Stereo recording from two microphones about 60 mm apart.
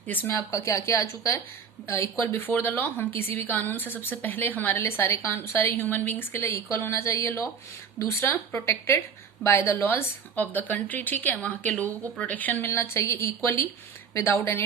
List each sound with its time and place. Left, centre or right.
0.3 s a woman's voice: left
2.2 s a woman's voice: left
10.3 s speech: left
12.6 s speech: left